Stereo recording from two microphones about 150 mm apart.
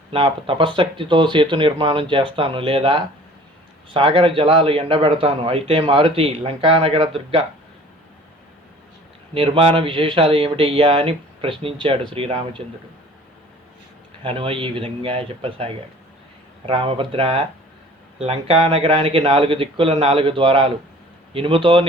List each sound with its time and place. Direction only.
0.1 s a man's voice: 35° right (ahead or behind)
9.3 s a man's voice: 40° right (ahead or behind)
14.3 s a man's voice: 35° right (ahead or behind)